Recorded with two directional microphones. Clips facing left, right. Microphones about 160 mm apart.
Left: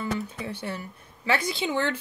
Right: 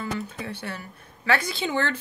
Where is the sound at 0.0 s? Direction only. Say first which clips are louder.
Left 1 dB; 15° left (ahead or behind).